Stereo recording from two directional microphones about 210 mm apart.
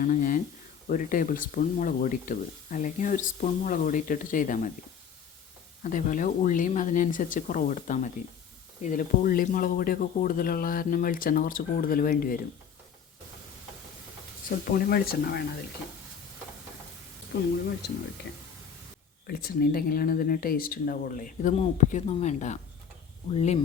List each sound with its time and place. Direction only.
0.0 s a sound: 40° left (ahead or behind)
0.9 s speech: 40° left (ahead or behind)
5.8 s speech: 35° left (ahead or behind)
14.5 s speech: 50° left (ahead or behind)
17.3 s speech: 45° left (ahead or behind)
19.3 s speech: 45° left (ahead or behind)